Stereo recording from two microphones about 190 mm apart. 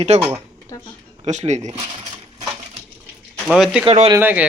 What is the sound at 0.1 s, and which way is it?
Speech, 35° right (ahead or behind).